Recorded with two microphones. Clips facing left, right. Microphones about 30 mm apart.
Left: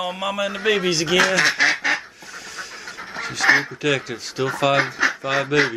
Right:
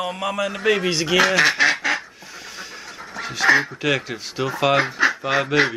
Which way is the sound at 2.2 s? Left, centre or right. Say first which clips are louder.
Left 2 dB; centre.